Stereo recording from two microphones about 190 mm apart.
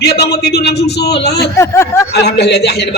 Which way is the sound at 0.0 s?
60° left (ahead or behind).